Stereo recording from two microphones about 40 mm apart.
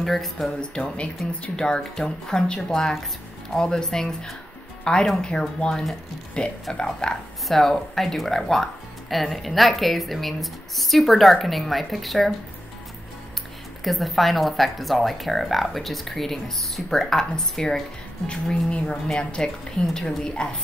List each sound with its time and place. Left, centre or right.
0.0 s speech: centre
0.5 s speech: left
7.4 s speech: centre
13.8 s speech: centre
17.2 s speech: centre
18.2 s speech: left